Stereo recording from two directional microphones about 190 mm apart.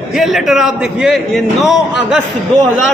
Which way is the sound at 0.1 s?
Centre (ahead or behind).